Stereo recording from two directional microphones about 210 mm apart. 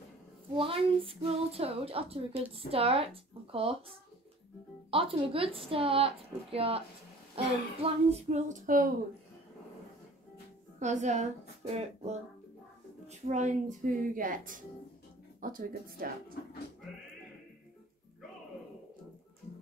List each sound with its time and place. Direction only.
0.6 s a woman's voice: 25° right (ahead or behind)
4.9 s a woman's voice: 25° right (ahead or behind)
10.8 s a woman's voice: 35° right (ahead or behind)
13.3 s a woman's voice: 35° right (ahead or behind)